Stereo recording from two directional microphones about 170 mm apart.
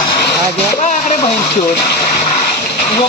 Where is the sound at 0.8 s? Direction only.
50° left (ahead or behind).